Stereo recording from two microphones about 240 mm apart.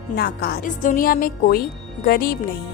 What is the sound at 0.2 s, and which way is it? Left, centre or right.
A woman's voice, left.